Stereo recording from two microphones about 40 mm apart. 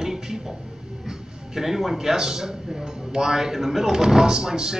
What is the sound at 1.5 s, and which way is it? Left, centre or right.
Speech, centre.